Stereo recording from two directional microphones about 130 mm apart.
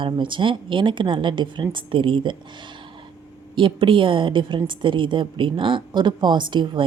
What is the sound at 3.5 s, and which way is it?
Speech, 40° right (ahead or behind).